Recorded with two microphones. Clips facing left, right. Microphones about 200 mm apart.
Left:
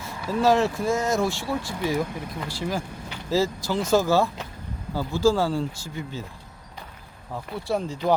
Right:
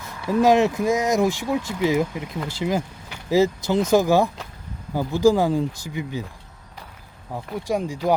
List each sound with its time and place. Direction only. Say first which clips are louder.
0.0 s speech: right 4 dB; 15° right (ahead or behind)
7.3 s speech: right 2 dB; 15° right (ahead or behind)